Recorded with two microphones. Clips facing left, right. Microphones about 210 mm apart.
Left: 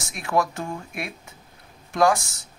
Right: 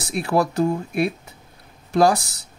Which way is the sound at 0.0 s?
35° right (ahead or behind).